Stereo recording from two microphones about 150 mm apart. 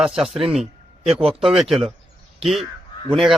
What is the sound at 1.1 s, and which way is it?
Speech, 40° right (ahead or behind).